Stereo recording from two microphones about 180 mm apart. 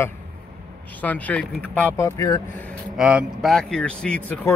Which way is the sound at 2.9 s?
5° right (ahead or behind).